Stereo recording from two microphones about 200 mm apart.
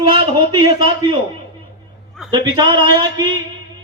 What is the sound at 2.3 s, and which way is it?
Speech, 20° right (ahead or behind).